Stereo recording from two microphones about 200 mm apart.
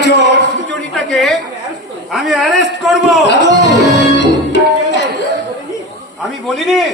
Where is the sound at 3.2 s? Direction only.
60° left (ahead or behind).